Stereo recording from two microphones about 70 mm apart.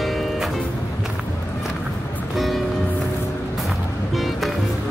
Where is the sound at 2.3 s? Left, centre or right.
Centre.